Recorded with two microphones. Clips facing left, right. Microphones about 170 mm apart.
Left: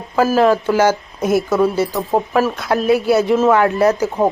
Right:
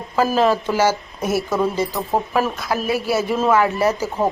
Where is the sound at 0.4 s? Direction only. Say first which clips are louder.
Left 4 dB; 10° right (ahead or behind).